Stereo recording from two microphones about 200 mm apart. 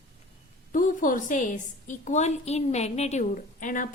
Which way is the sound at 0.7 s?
40° left (ahead or behind).